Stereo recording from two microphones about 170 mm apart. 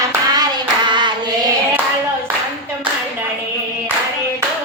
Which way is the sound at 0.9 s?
25° right (ahead or behind).